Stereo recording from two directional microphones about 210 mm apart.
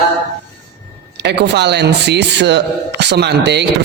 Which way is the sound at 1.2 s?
55° right (ahead or behind).